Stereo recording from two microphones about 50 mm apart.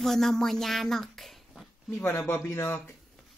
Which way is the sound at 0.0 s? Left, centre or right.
Centre.